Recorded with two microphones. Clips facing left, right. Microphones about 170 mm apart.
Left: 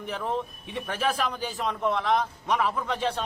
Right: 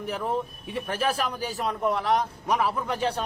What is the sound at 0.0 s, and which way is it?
A man's voice, 10° right (ahead or behind).